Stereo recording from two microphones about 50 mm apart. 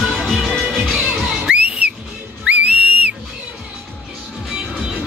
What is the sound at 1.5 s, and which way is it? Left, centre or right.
Whistle, right.